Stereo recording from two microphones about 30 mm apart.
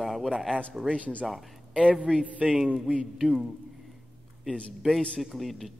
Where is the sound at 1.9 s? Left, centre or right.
Right.